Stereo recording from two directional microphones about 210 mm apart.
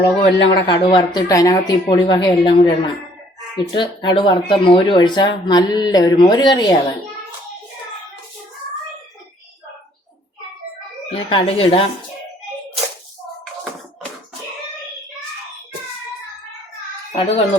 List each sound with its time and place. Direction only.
0.2 s speech: 25° left (ahead or behind)
11.1 s speech: 25° left (ahead or behind)
17.1 s a child's voice: 25° left (ahead or behind)